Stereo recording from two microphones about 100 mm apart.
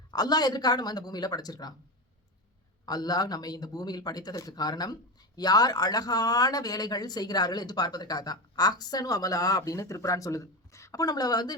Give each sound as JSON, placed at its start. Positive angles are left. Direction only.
{"t": 0.1, "sound": "speech", "side_deg": 40}
{"t": 2.8, "sound": "speech", "side_deg": 40}